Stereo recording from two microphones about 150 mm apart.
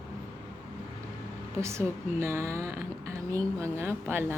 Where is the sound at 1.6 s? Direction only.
20° right (ahead or behind).